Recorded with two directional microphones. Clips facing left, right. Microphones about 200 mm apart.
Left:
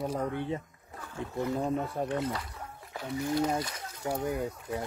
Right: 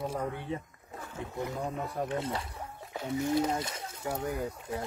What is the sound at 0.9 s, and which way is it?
Speech, 20° right (ahead or behind).